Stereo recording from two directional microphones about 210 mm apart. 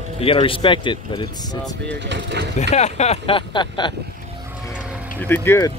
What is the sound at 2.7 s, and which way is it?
Speech, 30° left (ahead or behind).